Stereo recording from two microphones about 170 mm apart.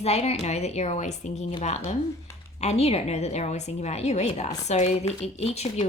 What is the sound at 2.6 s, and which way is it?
A woman's voice, 40° left (ahead or behind).